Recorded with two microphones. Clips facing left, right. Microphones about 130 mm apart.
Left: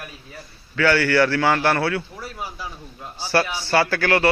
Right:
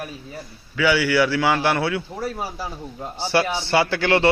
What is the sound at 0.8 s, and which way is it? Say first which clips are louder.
A man's voice: left 1 dB; 10° right (ahead or behind).